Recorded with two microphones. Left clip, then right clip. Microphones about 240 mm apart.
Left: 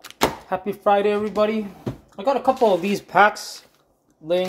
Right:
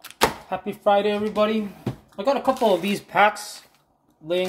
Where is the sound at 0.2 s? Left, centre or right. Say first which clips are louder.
Even; centre.